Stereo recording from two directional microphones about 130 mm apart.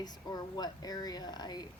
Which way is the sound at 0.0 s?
30° left (ahead or behind).